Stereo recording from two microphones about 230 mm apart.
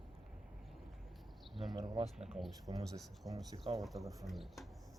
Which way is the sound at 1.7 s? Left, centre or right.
Right.